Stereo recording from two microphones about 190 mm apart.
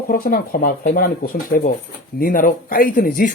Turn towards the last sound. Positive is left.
turn(degrees=45)  # may be behind; listen again after turning